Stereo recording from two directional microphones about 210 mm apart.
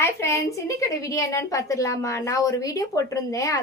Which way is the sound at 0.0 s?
15° left (ahead or behind).